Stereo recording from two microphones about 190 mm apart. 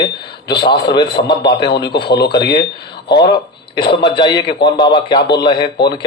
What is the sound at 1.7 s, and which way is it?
Speech, 60° left (ahead or behind).